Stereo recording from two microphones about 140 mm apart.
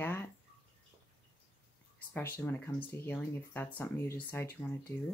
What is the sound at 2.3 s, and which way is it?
Speech, 15° left (ahead or behind).